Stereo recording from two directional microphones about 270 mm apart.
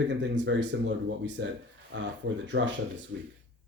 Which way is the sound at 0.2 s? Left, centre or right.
Right.